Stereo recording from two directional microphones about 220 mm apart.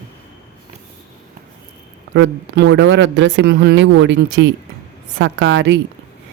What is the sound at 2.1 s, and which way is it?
A man's voice, 55° right (ahead or behind).